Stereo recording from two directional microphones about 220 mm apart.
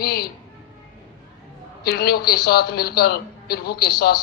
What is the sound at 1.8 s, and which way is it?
A woman's voice, 45° left (ahead or behind).